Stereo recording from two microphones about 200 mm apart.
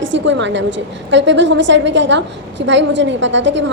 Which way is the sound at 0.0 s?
65° right (ahead or behind).